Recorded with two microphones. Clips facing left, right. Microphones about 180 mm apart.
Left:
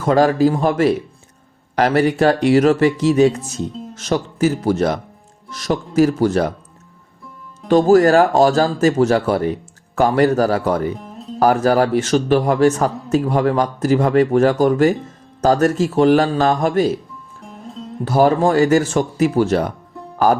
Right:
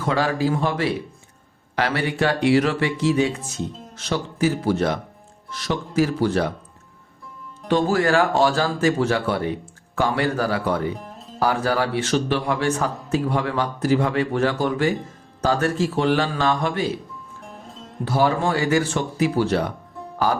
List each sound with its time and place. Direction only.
0.0 s a man's voice: 45° left (ahead or behind)
7.7 s a man's voice: 40° left (ahead or behind)
18.0 s a man's voice: 45° left (ahead or behind)